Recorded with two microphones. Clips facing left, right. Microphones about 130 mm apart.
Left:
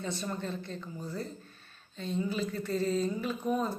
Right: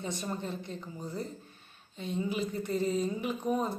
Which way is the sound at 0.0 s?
15° right (ahead or behind).